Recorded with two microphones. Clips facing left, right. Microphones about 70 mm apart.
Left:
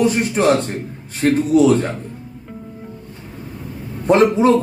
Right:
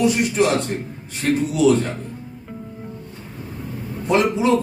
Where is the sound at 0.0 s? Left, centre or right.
Left.